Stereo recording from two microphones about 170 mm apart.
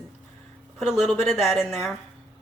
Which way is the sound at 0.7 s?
10° left (ahead or behind).